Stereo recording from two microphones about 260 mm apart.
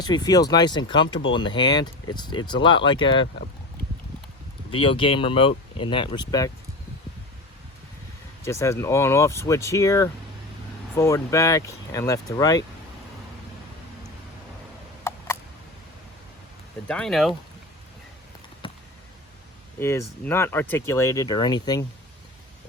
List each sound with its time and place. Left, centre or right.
0.0 s speech: centre
4.7 s speech: left
8.4 s speech: centre
15.1 s a sound: centre
16.9 s speech: centre
18.6 s a sound: centre
19.8 s speech: centre